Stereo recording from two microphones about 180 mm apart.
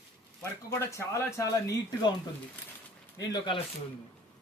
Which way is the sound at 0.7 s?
15° left (ahead or behind).